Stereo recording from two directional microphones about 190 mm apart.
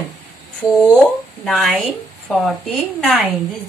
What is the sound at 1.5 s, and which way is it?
A woman's voice, centre (ahead or behind).